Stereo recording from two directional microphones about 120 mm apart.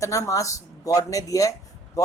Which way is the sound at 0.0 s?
25° left (ahead or behind).